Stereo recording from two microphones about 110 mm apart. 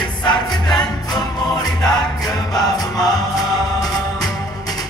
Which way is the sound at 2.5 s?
35° left (ahead or behind).